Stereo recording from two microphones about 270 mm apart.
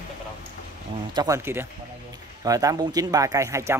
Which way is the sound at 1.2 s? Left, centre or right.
Centre.